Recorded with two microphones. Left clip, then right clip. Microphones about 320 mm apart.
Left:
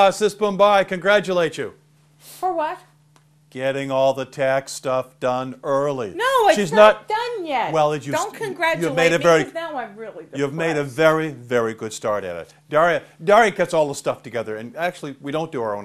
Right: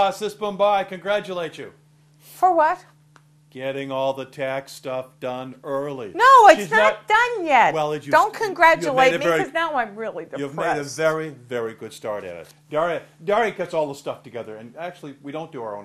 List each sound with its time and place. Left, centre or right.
0.0 s a man's voice: left
2.4 s speech: right
3.5 s a man's voice: left
6.1 s speech: right
7.7 s speech: left
8.1 s speech: right
8.9 s a man's voice: left
9.5 s speech: right
10.3 s a man's voice: left